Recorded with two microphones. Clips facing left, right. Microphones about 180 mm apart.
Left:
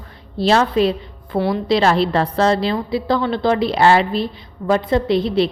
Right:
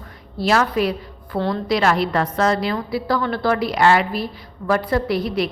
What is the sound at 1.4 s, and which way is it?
Speech, 15° left (ahead or behind).